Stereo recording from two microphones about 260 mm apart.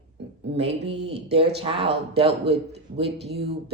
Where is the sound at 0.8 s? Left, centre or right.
Right.